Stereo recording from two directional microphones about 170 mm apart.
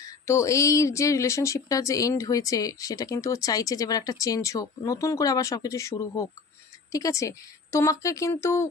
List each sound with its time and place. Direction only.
0.0 s a woman's voice: 15° left (ahead or behind)